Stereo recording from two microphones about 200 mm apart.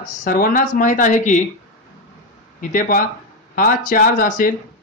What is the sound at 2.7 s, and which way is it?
Speech, 40° left (ahead or behind).